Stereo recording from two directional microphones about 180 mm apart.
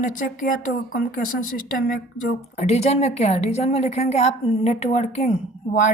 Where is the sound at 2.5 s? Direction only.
35° left (ahead or behind).